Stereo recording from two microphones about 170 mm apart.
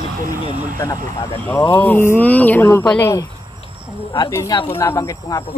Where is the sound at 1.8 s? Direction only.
10° left (ahead or behind).